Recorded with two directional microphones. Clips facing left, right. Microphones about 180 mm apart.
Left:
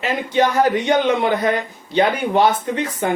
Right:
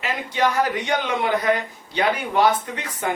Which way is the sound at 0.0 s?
25° left (ahead or behind).